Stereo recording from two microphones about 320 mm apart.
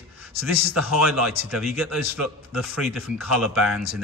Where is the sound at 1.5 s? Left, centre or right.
Centre.